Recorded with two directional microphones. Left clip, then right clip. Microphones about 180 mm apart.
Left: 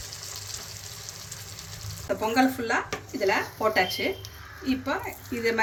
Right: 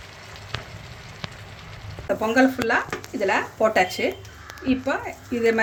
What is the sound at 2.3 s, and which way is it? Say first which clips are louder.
A woman's voice: right 5 dB; 60° right (ahead or behind).